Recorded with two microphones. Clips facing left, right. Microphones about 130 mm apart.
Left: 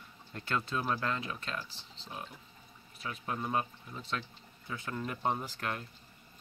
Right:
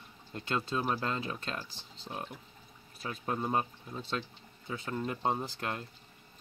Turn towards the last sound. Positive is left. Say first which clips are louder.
# right 1 dB
turn(degrees=-25)  # may be behind; listen again after turning